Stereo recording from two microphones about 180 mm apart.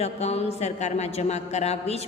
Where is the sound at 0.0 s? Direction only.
35° left (ahead or behind).